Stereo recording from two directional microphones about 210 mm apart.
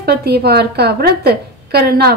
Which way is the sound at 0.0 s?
50° right (ahead or behind).